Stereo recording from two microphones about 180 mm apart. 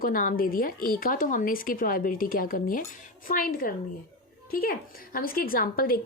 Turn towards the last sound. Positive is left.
turn(degrees=55)  # may be behind; listen again after turning